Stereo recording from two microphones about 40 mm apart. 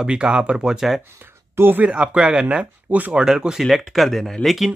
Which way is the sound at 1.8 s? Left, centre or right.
Right.